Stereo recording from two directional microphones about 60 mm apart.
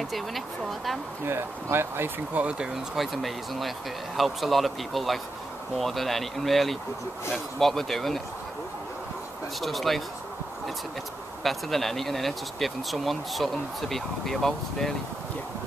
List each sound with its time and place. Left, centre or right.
0.1 s speech: centre
1.2 s speech: right
2.6 s speech: centre
9.6 s speech: centre
11.4 s speech: centre